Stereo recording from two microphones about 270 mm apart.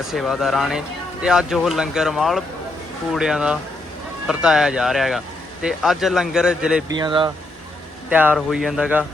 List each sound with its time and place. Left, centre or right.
0.1 s speech: centre
6.9 s speech: centre
8.1 s speech: centre